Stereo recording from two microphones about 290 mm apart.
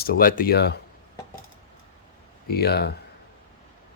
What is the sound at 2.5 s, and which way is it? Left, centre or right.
Speech, left.